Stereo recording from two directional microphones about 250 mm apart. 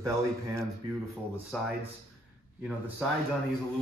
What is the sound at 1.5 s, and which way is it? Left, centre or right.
Speech, centre.